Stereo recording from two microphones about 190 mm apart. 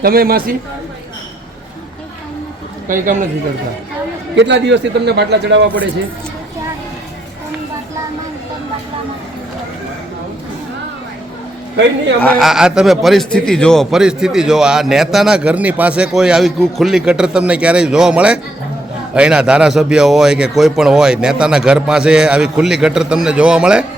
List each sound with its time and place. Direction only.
0.0 s a man's voice: 50° right (ahead or behind)
2.8 s a man's voice: 45° right (ahead or behind)
4.4 s a man's voice: 70° right (ahead or behind)
12.2 s a man's voice: centre (ahead or behind)